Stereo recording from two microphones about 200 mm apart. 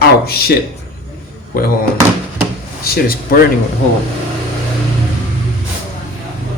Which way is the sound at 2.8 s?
50° left (ahead or behind).